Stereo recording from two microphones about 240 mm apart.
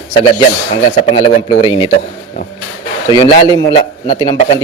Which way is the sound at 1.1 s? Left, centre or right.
Left.